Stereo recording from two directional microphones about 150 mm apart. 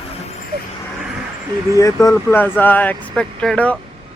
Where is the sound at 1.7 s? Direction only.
20° left (ahead or behind).